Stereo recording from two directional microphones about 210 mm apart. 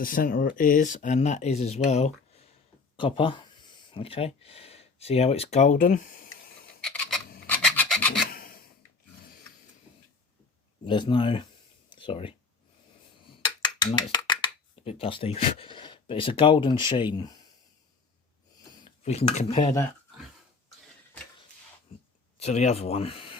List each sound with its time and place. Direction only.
0.0 s speech: 40° left (ahead or behind)
6.8 s filing: 5° left (ahead or behind)
8.3 s rub: 45° left (ahead or behind)
10.8 s speech: 20° left (ahead or behind)
11.9 s a sound: 25° left (ahead or behind)
13.8 s speech: 20° left (ahead or behind)
18.9 s speech: 30° left (ahead or behind)
22.4 s speech: 30° left (ahead or behind)